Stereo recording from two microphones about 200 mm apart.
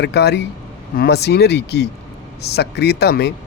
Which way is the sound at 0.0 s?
55° left (ahead or behind).